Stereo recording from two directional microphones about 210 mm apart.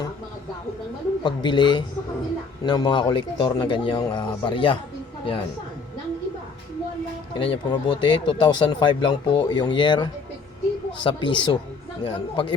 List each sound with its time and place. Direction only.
1.2 s speech: 20° left (ahead or behind)
7.3 s speech: 25° left (ahead or behind)